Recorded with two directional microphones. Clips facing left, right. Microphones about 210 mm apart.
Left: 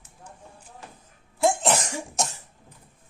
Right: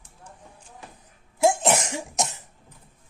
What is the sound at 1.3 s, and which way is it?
Cough, 20° right (ahead or behind).